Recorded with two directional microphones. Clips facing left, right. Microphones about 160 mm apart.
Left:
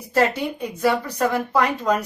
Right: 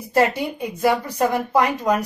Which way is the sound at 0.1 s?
15° right (ahead or behind).